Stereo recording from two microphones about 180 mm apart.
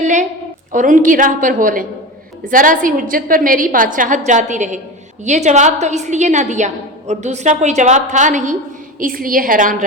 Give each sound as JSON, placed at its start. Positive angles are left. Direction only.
{"t": 0.0, "sound": "a woman's voice", "side_deg": -40}